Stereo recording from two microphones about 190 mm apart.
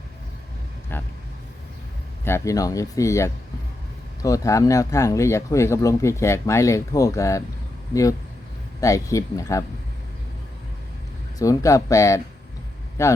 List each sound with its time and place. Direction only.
0.9 s vehicle: 10° left (ahead or behind)
2.2 s speech: 15° left (ahead or behind)
8.8 s speech: 15° left (ahead or behind)
11.3 s speech: 15° left (ahead or behind)